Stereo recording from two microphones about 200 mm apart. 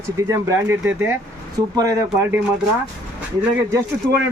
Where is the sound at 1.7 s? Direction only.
15° right (ahead or behind).